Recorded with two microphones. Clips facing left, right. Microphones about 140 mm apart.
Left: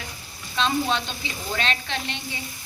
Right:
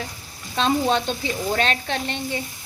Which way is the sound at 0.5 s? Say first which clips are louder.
Right 4 dB; 45° right (ahead or behind).